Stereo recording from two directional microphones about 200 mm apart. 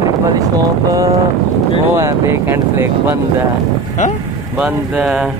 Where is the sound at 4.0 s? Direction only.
35° left (ahead or behind).